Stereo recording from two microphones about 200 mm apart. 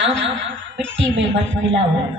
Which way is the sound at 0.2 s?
70° right (ahead or behind).